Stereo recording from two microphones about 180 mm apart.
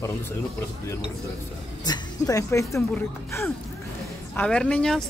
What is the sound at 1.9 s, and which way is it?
A woman's voice, 20° left (ahead or behind).